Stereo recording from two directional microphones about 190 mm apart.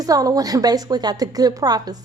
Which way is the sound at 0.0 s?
20° right (ahead or behind).